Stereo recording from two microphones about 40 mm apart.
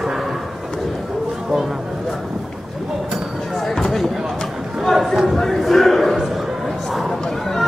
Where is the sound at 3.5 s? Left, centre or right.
Centre.